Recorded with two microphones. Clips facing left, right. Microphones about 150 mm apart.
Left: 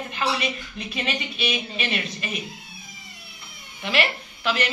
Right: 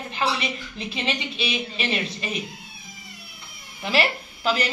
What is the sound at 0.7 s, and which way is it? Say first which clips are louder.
Speech: right 1 dB; 25° right (ahead or behind).